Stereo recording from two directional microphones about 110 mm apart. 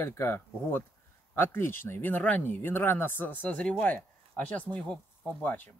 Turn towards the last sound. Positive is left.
turn(degrees=15)  # may be behind; listen again after turning